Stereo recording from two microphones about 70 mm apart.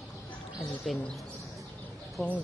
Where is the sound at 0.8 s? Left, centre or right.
Centre.